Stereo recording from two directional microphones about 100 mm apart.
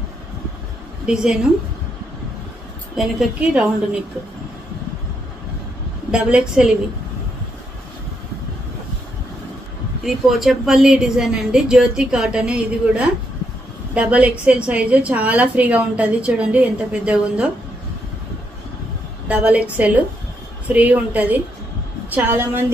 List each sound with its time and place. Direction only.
1.0 s a woman's voice: 5° right (ahead or behind)
3.0 s a woman's voice: 5° right (ahead or behind)
6.1 s a woman's voice: 10° right (ahead or behind)
10.0 s a woman's voice: centre (ahead or behind)
19.2 s a woman's voice: 15° right (ahead or behind)